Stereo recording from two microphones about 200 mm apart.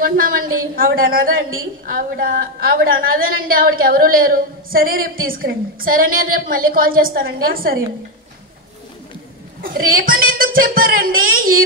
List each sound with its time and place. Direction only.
0.0 s a woman's voice: 45° right (ahead or behind)
9.6 s a woman's voice: 45° right (ahead or behind)